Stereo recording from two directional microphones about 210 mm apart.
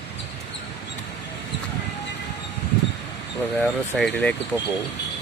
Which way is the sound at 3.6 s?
5° left (ahead or behind).